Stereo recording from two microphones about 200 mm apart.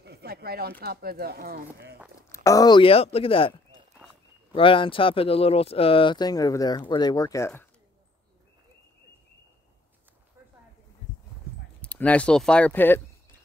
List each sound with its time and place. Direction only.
0.0 s speech: 55° right (ahead or behind)
2.1 s speech: 15° left (ahead or behind)
4.6 s speech: 25° left (ahead or behind)
11.8 s speech: 5° left (ahead or behind)